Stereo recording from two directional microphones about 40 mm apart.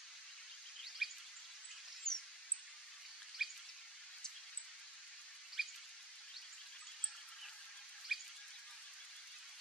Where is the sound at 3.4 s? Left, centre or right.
Centre.